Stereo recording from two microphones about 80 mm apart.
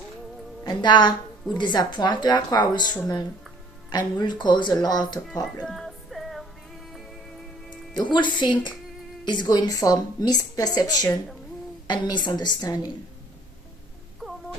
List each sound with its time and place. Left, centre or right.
0.6 s speech: left
1.5 s a woman's voice: left
5.6 s music: centre
7.9 s a woman's voice: left
9.2 s a woman's voice: left
11.9 s a woman's voice: left